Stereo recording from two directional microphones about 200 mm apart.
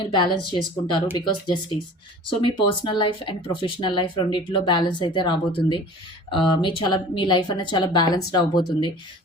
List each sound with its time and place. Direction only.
0.0 s speech: 20° left (ahead or behind)